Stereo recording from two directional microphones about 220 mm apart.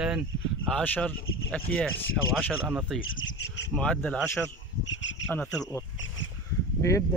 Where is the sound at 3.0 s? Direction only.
60° left (ahead or behind).